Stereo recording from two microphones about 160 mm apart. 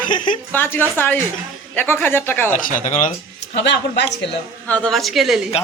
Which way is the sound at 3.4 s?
90° left.